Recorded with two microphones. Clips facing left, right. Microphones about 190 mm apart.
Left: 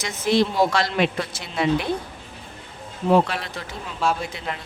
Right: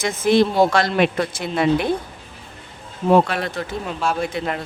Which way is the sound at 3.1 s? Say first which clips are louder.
Right 3 dB; 55° right (ahead or behind).